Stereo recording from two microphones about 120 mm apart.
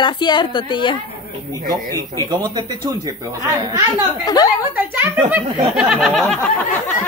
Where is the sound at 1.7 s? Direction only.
30° right (ahead or behind).